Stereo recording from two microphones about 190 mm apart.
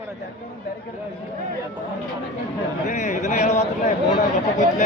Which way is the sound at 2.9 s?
40° left (ahead or behind).